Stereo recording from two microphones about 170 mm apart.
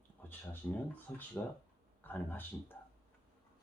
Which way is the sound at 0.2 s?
10° left (ahead or behind).